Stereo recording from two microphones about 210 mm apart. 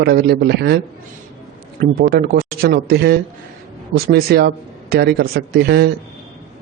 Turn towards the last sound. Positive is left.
turn(degrees=-50)  # may be behind; listen again after turning